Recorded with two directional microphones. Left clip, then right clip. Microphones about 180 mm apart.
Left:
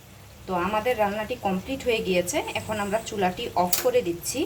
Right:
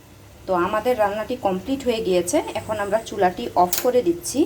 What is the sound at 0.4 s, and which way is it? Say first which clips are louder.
A woman's voice: right 4 dB; 15° right (ahead or behind).